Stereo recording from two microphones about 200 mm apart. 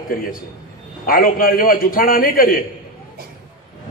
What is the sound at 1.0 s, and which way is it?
A man's voice, 45° left (ahead or behind).